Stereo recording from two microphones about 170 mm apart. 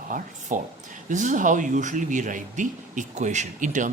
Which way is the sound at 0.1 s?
50° right (ahead or behind).